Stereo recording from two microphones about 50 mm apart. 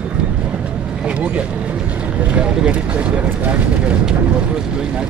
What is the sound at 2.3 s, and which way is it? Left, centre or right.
Speech, right.